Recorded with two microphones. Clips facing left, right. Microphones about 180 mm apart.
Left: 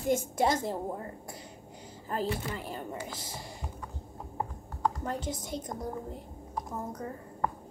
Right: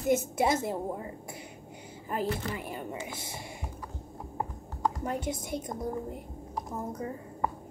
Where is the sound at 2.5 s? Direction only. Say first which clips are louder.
Right 1 dB; 10° right (ahead or behind).